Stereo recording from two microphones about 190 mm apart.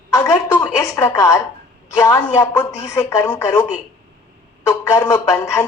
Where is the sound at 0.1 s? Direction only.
15° left (ahead or behind).